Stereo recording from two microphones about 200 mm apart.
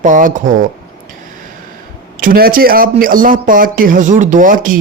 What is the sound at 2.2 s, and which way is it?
Speech, 45° right (ahead or behind).